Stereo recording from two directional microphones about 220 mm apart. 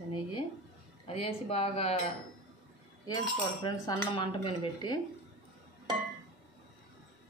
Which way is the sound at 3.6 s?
20° left (ahead or behind).